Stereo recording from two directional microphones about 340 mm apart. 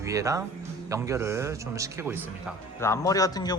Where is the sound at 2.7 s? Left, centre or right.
Centre.